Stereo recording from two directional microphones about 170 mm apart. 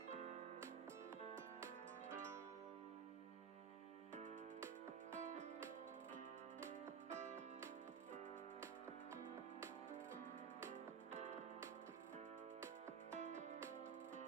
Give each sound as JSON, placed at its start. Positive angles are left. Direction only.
{"t": 5.1, "sound": "music", "side_deg": -45}
{"t": 7.1, "sound": "music", "side_deg": -45}
{"t": 13.1, "sound": "music", "side_deg": -45}